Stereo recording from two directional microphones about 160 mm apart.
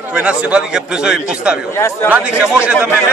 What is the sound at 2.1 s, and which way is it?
Speech, 10° right (ahead or behind).